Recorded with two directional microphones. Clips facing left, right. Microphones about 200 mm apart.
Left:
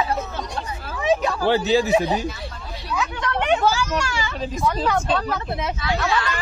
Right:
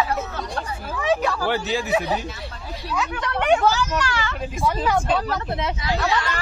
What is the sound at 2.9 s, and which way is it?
Speech, centre (ahead or behind).